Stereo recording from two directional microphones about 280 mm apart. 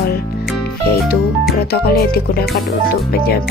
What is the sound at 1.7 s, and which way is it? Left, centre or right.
Speech, left.